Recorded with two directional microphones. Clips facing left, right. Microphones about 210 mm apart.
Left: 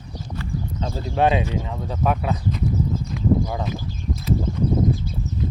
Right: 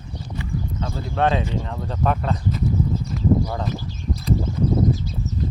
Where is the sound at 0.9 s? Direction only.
15° left (ahead or behind).